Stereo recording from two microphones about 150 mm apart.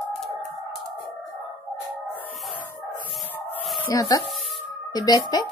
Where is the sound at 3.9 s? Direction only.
25° left (ahead or behind).